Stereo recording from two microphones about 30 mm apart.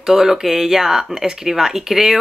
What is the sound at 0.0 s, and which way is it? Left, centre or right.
Speech, centre.